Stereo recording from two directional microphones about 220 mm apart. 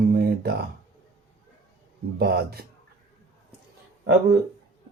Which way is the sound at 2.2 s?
45° right (ahead or behind).